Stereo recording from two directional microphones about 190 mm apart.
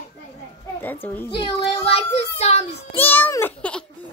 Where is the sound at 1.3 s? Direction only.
30° left (ahead or behind).